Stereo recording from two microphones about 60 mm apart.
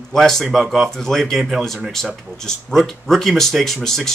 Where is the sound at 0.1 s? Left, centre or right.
Centre.